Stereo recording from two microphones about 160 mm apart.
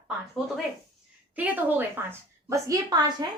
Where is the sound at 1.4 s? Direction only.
10° right (ahead or behind).